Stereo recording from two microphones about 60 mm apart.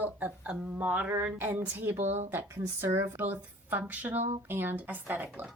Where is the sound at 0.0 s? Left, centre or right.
Right.